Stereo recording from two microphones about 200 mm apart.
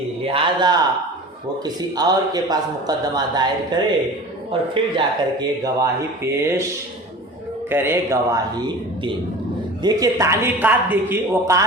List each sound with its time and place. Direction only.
0.3 s a man's voice: 25° right (ahead or behind)
7.7 s speech: 10° right (ahead or behind)